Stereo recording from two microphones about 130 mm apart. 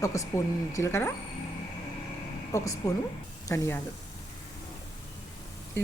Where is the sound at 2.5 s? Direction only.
25° left (ahead or behind).